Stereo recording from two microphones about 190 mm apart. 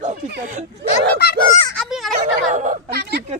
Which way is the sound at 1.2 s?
55° left (ahead or behind).